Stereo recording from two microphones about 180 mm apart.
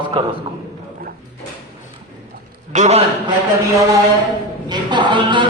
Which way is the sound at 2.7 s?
40° right (ahead or behind).